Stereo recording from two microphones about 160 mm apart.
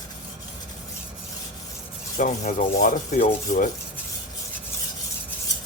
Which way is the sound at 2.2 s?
50° left (ahead or behind).